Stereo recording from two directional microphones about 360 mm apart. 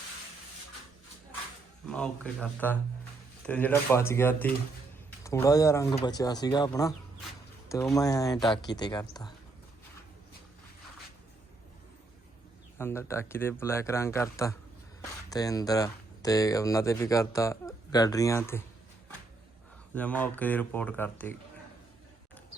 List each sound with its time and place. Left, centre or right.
1.9 s speech: centre
12.8 s speech: centre
19.9 s speech: centre